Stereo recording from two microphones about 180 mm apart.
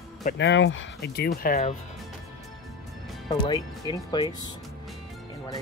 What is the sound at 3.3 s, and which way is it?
Speech, 20° left (ahead or behind).